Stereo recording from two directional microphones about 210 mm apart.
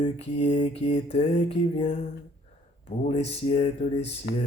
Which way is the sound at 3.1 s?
30° left (ahead or behind).